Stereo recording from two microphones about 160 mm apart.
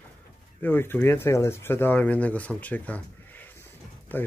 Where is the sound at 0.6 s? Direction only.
15° left (ahead or behind).